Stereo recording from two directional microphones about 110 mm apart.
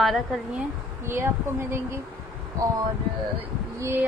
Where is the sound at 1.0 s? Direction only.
25° right (ahead or behind).